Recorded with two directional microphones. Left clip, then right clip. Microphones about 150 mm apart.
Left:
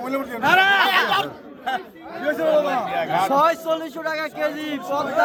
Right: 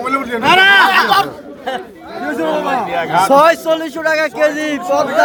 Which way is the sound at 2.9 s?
30° left (ahead or behind).